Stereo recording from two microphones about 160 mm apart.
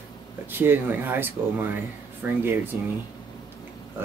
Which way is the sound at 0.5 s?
15° right (ahead or behind).